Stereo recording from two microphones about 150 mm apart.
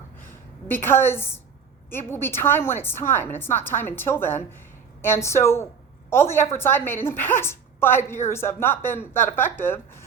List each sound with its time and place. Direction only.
0.7 s a woman's voice: 15° left (ahead or behind)